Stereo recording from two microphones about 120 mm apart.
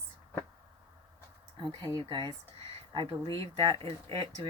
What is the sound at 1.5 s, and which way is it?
Speech, 40° right (ahead or behind).